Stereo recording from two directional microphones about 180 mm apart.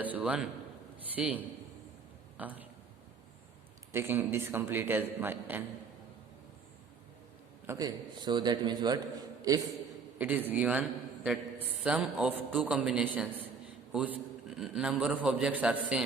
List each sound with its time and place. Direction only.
0.0 s a man's voice: 10° right (ahead or behind)
3.9 s a man's voice: 15° right (ahead or behind)
7.7 s a man's voice: 20° right (ahead or behind)
10.2 s a man's voice: 10° right (ahead or behind)
14.5 s a man's voice: 5° right (ahead or behind)